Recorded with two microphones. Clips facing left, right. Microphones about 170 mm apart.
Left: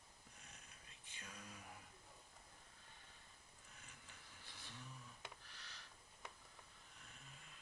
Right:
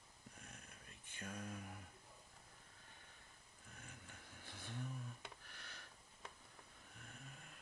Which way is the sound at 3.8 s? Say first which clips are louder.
Right 7 dB; 50° right (ahead or behind).